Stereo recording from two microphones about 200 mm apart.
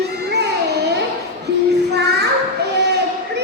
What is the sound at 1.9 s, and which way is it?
Child singing, 55° right (ahead or behind).